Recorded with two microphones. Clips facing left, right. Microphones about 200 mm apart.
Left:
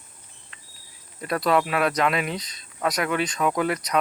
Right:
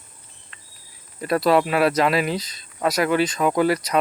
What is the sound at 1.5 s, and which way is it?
Speech, 30° right (ahead or behind).